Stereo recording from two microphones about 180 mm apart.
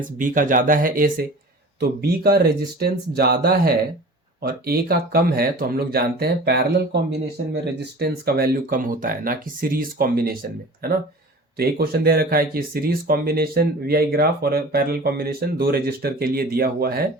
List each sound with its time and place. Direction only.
0.0 s speech: 45° right (ahead or behind)